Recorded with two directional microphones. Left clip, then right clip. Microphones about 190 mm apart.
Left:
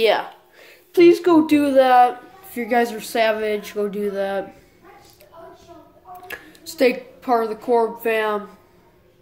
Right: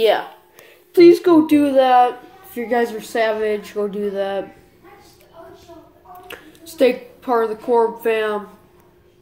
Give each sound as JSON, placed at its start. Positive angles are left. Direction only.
{"t": 0.0, "sound": "a sound", "side_deg": 20}
{"t": 0.9, "sound": "a woman's voice", "side_deg": 0}
{"t": 6.2, "sound": "a woman's voice", "side_deg": 10}